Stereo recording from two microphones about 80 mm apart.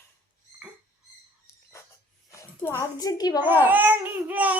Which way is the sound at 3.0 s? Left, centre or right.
Left.